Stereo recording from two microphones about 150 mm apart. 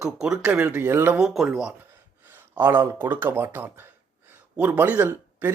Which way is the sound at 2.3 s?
15° right (ahead or behind).